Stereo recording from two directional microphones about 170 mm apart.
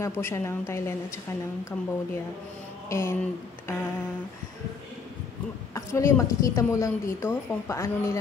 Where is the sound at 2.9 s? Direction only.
15° left (ahead or behind).